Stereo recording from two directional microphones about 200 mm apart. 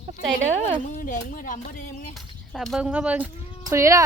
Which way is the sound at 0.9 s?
45° left (ahead or behind).